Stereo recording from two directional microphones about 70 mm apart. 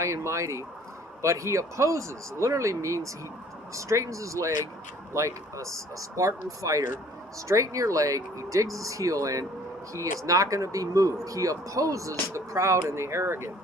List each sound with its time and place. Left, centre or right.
0.0 s speech: right